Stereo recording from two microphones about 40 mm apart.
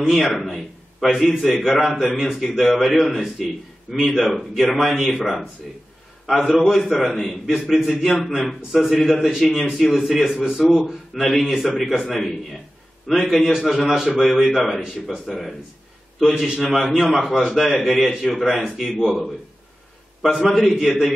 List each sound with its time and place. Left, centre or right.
0.1 s a man's voice: centre
13.4 s a man's voice: centre